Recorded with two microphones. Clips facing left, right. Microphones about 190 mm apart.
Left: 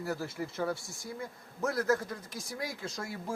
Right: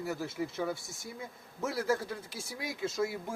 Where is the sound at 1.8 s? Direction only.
10° right (ahead or behind).